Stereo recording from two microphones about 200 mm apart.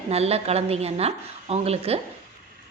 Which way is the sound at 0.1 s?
30° right (ahead or behind).